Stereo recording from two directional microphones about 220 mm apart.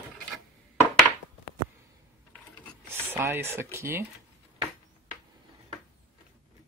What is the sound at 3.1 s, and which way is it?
Speech, 10° right (ahead or behind).